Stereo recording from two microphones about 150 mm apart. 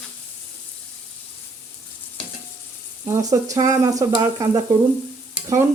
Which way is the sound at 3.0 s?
20° right (ahead or behind).